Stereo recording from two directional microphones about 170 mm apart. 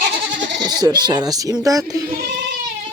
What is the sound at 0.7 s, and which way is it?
Speech, 25° right (ahead or behind).